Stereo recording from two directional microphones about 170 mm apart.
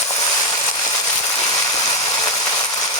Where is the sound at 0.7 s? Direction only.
20° left (ahead or behind).